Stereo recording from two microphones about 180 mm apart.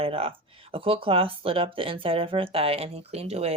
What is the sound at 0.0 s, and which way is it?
Speech, 30° right (ahead or behind).